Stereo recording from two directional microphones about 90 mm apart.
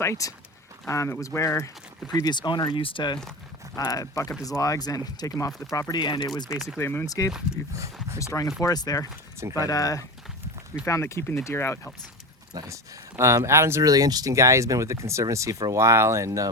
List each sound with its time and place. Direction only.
0.0 s speech: 35° left (ahead or behind)
2.2 s speech: 55° left (ahead or behind)
3.8 s speech: 45° left (ahead or behind)
5.9 s speech: 60° left (ahead or behind)
6.2 s speech: 50° left (ahead or behind)
6.5 s speech: 5° right (ahead or behind)
6.7 s speech: 25° left (ahead or behind)
7.0 s speech: 45° left (ahead or behind)
7.5 s speech: 5° right (ahead or behind)
8.6 s speech: 45° left (ahead or behind); by 11.8 s 30° left (ahead or behind)
12.6 s speech: 35° right (ahead or behind)
13.9 s speech: 45° right (ahead or behind)